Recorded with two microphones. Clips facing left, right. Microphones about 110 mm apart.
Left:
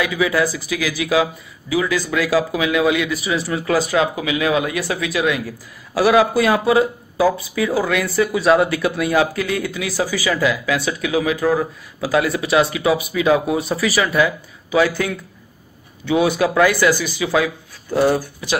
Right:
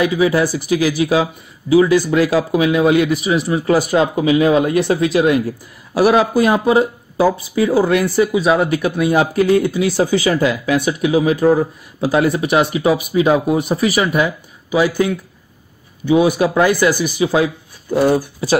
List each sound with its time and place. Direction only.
0.0 s speech: 30° right (ahead or behind)
3.3 s speech: 20° right (ahead or behind)
3.9 s speech: 35° right (ahead or behind); by 7.8 s 20° right (ahead or behind)
7.8 s speech: 30° right (ahead or behind)
14.7 s speech: 15° right (ahead or behind)